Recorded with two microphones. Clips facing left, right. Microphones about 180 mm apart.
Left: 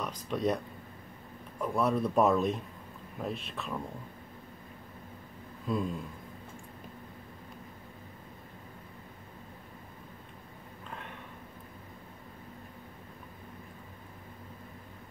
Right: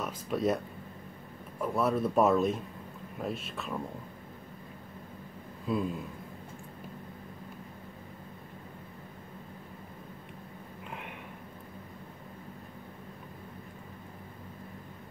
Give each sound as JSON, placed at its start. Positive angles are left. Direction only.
{"t": 0.0, "sound": "speech", "side_deg": -5}
{"t": 1.6, "sound": "speech", "side_deg": -5}
{"t": 5.7, "sound": "speech", "side_deg": -5}